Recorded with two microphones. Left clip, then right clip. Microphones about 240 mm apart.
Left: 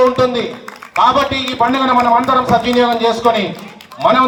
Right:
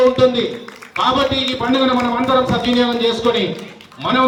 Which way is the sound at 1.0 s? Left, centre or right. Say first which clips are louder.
Left 3 dB; centre.